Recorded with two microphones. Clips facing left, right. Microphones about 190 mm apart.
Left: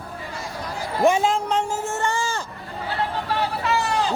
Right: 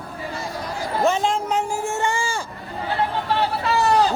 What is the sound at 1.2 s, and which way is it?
Speech, 5° right (ahead or behind).